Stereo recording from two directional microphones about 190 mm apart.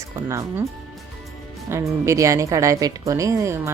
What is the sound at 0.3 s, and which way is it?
Speech, 15° right (ahead or behind).